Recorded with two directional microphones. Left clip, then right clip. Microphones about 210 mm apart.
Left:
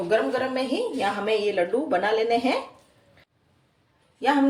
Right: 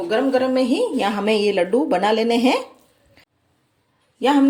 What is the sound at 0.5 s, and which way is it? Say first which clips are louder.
A woman's voice: right 7 dB; 50° right (ahead or behind).